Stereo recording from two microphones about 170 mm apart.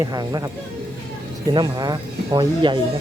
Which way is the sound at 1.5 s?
25° right (ahead or behind).